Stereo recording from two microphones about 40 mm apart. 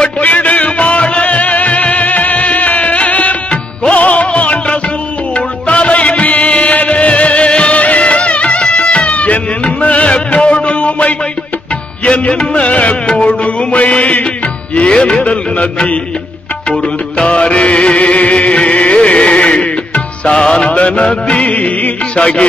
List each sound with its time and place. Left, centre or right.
0.2 s music: left
15.2 s a sound: left
17.2 s music: left